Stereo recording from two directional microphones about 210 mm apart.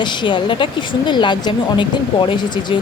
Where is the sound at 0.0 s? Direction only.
20° left (ahead or behind).